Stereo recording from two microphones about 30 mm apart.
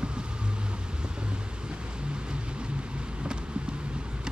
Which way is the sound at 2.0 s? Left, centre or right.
Right.